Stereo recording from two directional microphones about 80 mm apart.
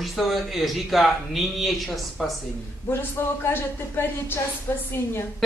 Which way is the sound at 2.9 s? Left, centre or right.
Left.